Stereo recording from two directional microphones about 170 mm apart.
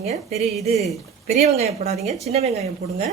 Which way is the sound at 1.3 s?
40° right (ahead or behind).